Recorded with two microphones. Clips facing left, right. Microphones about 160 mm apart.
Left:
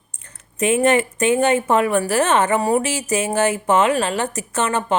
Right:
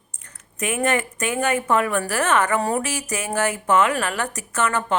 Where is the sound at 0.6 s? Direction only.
25° left (ahead or behind).